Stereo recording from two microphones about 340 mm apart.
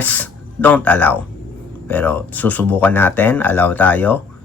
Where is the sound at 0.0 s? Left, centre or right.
Centre.